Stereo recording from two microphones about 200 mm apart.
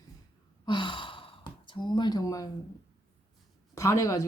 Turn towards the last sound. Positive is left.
turn(degrees=15)  # may be behind; listen again after turning